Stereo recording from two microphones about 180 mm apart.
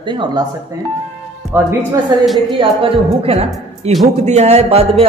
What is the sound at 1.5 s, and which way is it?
Speech, 10° right (ahead or behind).